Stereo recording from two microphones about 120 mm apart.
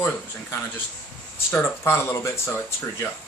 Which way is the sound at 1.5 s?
20° left (ahead or behind).